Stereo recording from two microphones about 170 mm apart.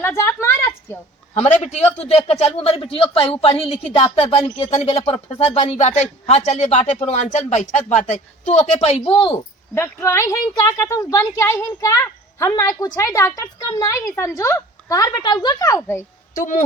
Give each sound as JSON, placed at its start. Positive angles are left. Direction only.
{"t": 0.0, "sound": "a sound", "side_deg": 15}
{"t": 1.6, "sound": "a woman's voice", "side_deg": 40}
{"t": 9.7, "sound": "a woman's voice", "side_deg": 15}
{"t": 16.3, "sound": "speech", "side_deg": 50}